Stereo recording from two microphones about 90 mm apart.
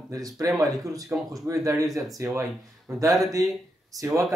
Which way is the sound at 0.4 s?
35° right (ahead or behind).